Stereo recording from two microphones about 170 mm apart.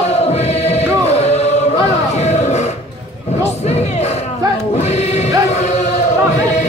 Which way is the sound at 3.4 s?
40° left (ahead or behind).